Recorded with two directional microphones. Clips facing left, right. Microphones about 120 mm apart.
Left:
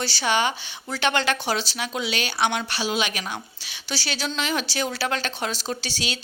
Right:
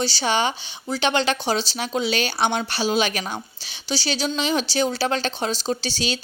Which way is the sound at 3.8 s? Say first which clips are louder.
Right 5 dB; 20° right (ahead or behind).